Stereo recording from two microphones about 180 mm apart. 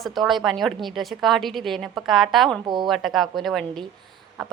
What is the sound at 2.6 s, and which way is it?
Speech, 25° right (ahead or behind).